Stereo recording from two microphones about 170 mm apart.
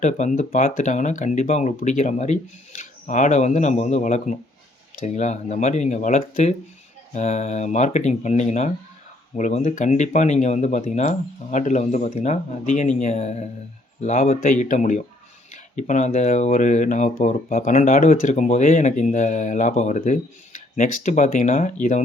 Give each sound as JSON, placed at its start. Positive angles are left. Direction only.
{"t": 0.0, "sound": "speech", "side_deg": 45}